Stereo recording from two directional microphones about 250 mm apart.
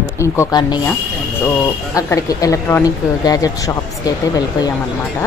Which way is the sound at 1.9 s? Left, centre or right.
Centre.